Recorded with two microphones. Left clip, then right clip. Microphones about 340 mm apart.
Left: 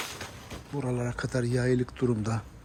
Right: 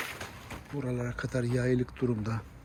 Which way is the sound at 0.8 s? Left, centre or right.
Centre.